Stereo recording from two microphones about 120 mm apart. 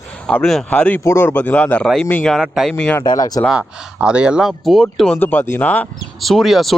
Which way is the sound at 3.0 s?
30° left (ahead or behind).